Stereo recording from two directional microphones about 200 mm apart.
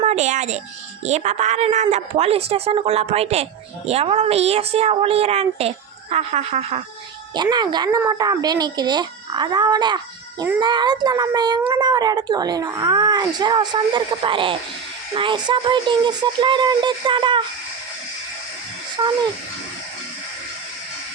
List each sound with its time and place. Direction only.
0.0 s a child's voice: 35° right (ahead or behind)
7.5 s speech: 20° right (ahead or behind)
19.0 s speech: 20° right (ahead or behind)